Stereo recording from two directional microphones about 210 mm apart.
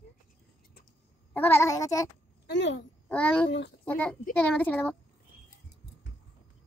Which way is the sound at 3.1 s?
5° left (ahead or behind).